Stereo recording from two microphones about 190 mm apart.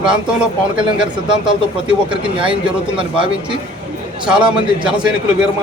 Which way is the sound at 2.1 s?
25° right (ahead or behind).